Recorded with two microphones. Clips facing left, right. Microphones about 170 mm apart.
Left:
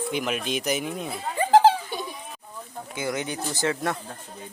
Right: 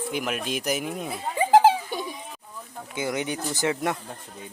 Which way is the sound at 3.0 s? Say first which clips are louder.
Right 1 dB; 20° right (ahead or behind).